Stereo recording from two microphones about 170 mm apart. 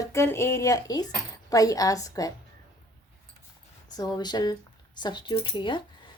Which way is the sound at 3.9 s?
20° left (ahead or behind).